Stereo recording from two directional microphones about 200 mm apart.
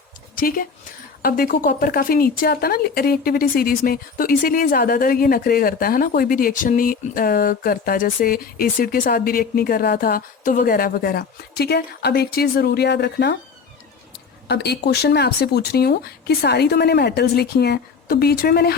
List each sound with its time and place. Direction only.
0.3 s a woman's voice: 45° left (ahead or behind)
14.4 s a woman's voice: 55° left (ahead or behind)